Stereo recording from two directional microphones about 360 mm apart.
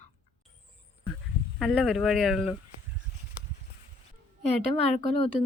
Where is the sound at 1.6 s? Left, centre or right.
Centre.